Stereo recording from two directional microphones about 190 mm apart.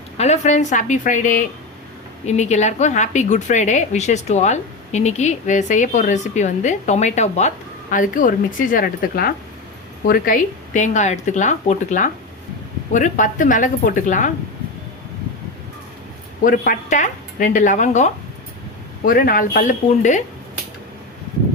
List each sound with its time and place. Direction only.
0.2 s a woman's voice: 35° left (ahead or behind)
16.4 s a woman's voice: 45° left (ahead or behind)
19.0 s a woman's voice: 50° left (ahead or behind)